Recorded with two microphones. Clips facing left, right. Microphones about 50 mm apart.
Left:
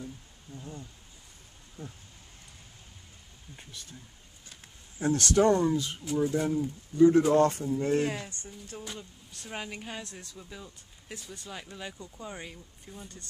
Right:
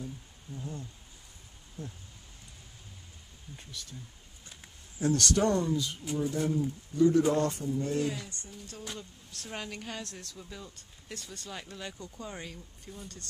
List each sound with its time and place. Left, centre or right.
0.0 s a sound: centre
5.0 s speech: left
5.7 s speech: left
6.1 s speech: centre
7.0 s speech: left
7.9 s speech: left
8.8 s speech: centre